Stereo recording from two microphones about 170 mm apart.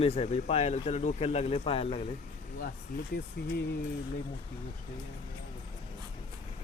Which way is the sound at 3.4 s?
70° left (ahead or behind).